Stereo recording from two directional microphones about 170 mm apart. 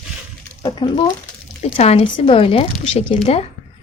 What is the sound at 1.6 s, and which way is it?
Speech, 40° left (ahead or behind).